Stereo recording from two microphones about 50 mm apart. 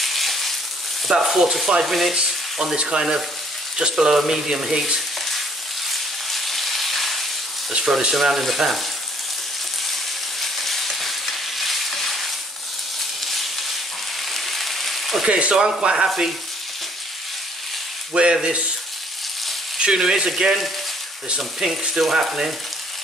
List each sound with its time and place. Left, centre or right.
0.0 s a sound: centre
1.0 s stir: centre
2.1 s frying: centre
2.8 s speech: centre
5.9 s a sound: centre
7.7 s speech: centre
10.4 s frying: centre
13.2 s a sound: centre
14.3 s rain on surface: centre
15.2 s speech: right
18.1 s speech: centre
19.8 s speech: centre